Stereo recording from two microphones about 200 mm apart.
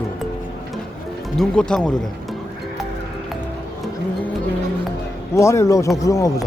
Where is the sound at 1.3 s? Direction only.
5° left (ahead or behind).